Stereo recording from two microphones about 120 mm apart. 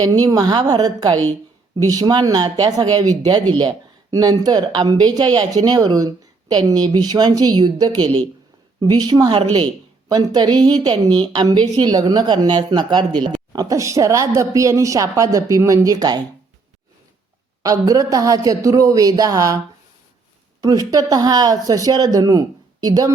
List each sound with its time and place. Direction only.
0.0 s a woman's voice: 30° right (ahead or behind)
17.6 s a woman's voice: 30° right (ahead or behind)
20.6 s a woman's voice: 30° right (ahead or behind)